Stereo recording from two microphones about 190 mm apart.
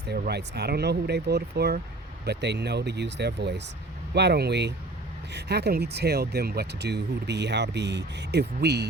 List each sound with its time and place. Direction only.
0.0 s speech: 60° right (ahead or behind)